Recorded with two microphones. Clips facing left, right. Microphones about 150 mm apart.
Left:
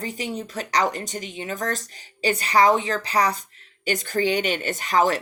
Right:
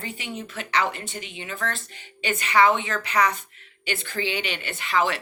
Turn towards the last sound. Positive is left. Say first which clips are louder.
# left 4 dB
turn(degrees=40)  # may be behind; listen again after turning